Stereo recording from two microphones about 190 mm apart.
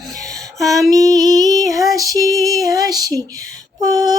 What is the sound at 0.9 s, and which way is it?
Female singing, 20° right (ahead or behind).